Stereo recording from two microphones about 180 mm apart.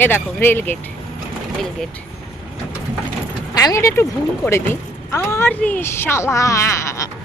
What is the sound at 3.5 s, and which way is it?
Speech, 20° left (ahead or behind).